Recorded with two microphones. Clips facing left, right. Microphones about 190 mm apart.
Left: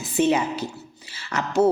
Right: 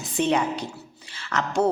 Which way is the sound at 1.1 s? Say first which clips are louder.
Left 2 dB; 5° left (ahead or behind).